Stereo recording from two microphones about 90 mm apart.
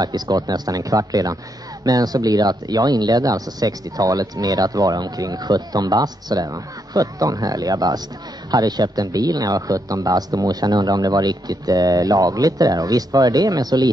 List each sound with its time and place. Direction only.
0.0 s speech: 45° right (ahead or behind)